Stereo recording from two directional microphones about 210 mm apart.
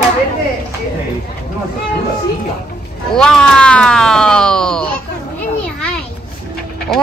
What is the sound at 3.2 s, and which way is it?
Speech, 5° left (ahead or behind).